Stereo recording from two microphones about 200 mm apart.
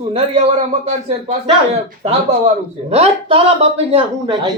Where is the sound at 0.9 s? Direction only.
35° right (ahead or behind).